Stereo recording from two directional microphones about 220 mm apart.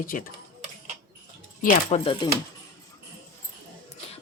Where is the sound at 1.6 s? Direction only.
25° left (ahead or behind).